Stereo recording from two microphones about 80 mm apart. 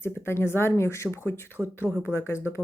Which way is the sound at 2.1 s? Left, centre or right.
Left.